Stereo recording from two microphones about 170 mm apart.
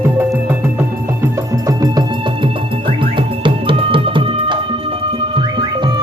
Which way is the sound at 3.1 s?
30° right (ahead or behind).